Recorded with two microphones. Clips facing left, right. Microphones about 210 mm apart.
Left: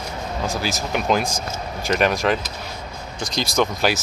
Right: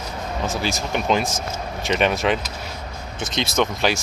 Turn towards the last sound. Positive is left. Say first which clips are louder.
# left 1 dB
turn(degrees=5)  # may be behind; listen again after turning